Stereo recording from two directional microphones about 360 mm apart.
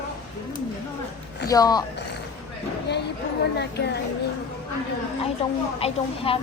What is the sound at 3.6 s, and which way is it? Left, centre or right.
Speech, left.